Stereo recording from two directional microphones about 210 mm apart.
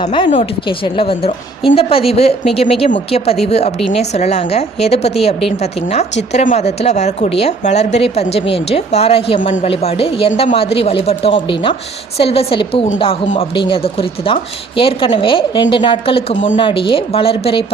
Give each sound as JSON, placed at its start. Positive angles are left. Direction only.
{"t": 0.9, "sound": "a woman's voice", "side_deg": 25}
{"t": 6.3, "sound": "a woman's voice", "side_deg": 35}